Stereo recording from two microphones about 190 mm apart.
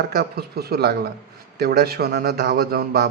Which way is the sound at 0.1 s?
55° right (ahead or behind).